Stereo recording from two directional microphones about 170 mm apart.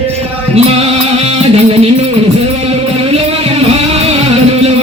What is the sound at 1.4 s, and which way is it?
Music, 35° right (ahead or behind).